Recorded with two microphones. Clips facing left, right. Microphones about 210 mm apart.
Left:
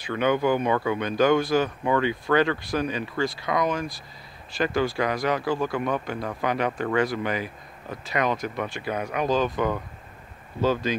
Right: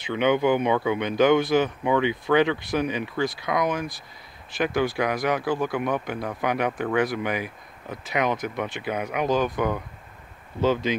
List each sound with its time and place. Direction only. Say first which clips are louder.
0.0 s speech: right 1 dB; 20° right (ahead or behind)